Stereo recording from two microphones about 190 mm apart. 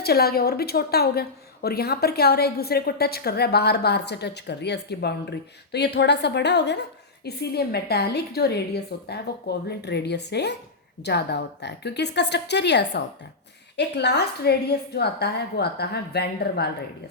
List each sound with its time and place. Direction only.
0.0 s a woman's voice: 55° left (ahead or behind)